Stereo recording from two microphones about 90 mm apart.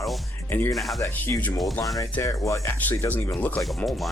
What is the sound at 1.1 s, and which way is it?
Speech, 20° left (ahead or behind).